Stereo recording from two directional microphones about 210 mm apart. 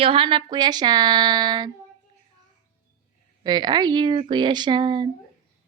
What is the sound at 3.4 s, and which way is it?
Speech, 20° right (ahead or behind).